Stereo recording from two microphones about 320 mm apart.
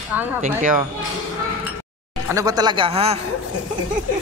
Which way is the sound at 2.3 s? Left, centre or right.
Centre.